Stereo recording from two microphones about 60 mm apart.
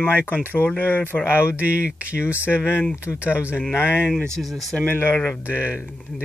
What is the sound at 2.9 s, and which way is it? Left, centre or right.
Speech, left.